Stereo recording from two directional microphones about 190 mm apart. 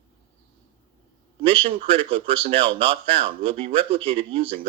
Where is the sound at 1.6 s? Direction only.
30° right (ahead or behind).